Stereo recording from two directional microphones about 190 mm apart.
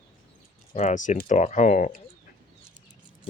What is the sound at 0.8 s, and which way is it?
Speech, 40° left (ahead or behind).